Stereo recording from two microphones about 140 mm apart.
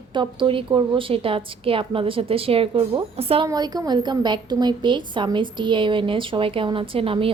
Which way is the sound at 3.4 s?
25° right (ahead or behind).